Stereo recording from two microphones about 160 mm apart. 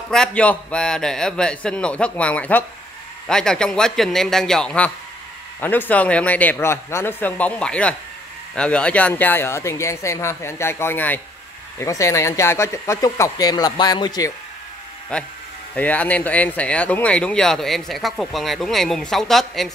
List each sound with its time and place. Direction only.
0.1 s speech: 5° left (ahead or behind); by 14.3 s 25° left (ahead or behind)
15.1 s speech: 5° left (ahead or behind)